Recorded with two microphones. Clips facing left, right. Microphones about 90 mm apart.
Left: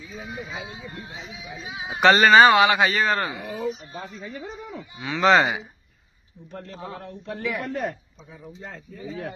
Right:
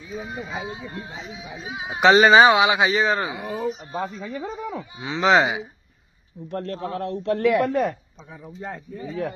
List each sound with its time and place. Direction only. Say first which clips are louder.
0.1 s speech: right 4 dB; 25° right (ahead or behind)
0.5 s speech: right 4 dB; 35° right (ahead or behind)
1.8 s speech: right 2 dB; 10° right (ahead or behind)
3.4 s speech: right 2 dB; 40° right (ahead or behind)
4.9 s speech: even; 20° right (ahead or behind)
6.5 s a man's voice: right 8 dB; 75° right (ahead or behind)